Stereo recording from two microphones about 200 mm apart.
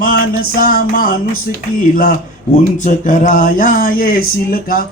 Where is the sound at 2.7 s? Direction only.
40° left (ahead or behind).